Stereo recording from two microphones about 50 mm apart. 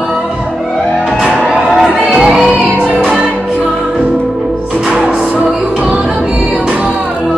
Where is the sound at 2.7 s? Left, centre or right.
Right.